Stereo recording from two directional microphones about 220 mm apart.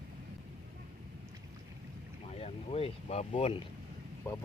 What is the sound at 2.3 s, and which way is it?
Speech, 30° left (ahead or behind).